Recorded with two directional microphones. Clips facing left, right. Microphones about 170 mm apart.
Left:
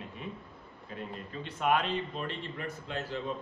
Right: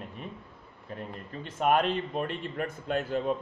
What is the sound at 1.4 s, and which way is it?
A man's voice, 45° right (ahead or behind).